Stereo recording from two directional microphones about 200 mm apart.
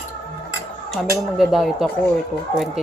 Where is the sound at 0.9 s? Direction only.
Centre (ahead or behind).